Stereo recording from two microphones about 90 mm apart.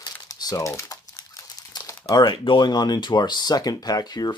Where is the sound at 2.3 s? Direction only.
70° left (ahead or behind).